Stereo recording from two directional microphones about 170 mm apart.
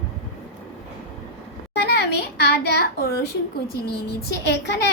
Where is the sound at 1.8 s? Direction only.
75° left (ahead or behind).